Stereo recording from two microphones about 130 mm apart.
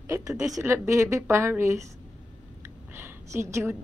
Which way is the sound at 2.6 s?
20° right (ahead or behind).